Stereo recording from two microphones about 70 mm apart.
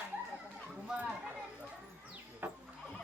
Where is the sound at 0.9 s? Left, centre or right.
Centre.